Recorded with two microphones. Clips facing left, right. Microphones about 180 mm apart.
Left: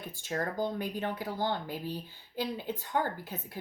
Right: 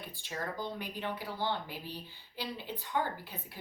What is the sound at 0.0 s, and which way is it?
Speech, 45° left (ahead or behind).